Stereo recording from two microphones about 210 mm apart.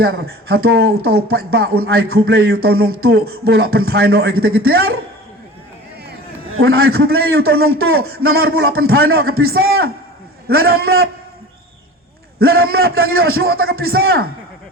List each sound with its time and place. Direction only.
0.4 s a man's voice: 50° right (ahead or behind)
6.5 s a sound: 75° right (ahead or behind)
6.7 s a man's voice: 45° right (ahead or behind)
12.4 s a man's voice: 45° right (ahead or behind)